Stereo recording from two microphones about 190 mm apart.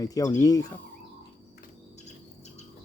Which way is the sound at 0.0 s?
20° left (ahead or behind).